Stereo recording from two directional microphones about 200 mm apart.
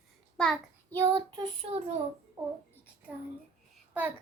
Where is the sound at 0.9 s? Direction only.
20° right (ahead or behind).